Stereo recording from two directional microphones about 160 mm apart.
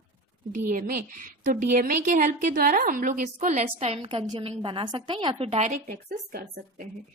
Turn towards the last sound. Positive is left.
turn(degrees=-65)  # may be behind; listen again after turning